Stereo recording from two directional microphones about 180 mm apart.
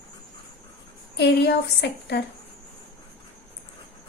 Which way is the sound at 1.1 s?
70° left (ahead or behind).